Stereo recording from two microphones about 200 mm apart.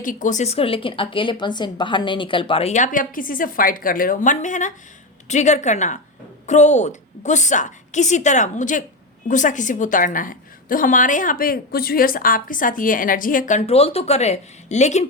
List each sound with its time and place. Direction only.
0.0 s a woman's voice: 40° left (ahead or behind)